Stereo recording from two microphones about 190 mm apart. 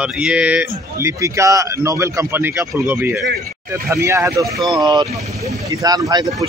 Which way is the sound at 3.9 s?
15° right (ahead or behind).